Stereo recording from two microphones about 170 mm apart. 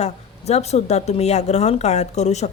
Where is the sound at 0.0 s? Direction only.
40° left (ahead or behind).